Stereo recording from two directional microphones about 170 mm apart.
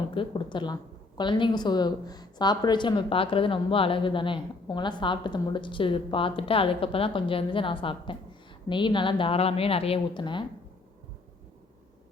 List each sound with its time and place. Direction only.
0.1 s a woman's voice: 30° left (ahead or behind)